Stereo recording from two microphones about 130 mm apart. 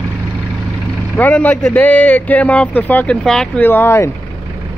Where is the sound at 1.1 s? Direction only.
10° left (ahead or behind).